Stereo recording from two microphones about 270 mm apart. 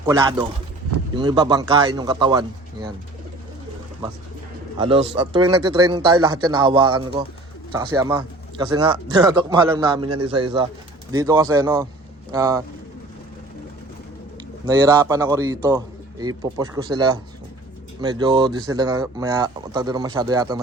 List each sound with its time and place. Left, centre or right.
0.0 s speech: centre
4.8 s speech: centre
14.7 s speech: centre